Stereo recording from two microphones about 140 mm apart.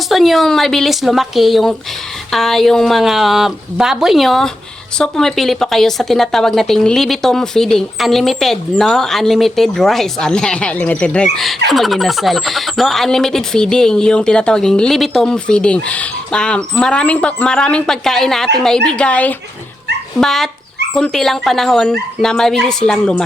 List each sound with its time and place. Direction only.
0.1 s speech: centre (ahead or behind)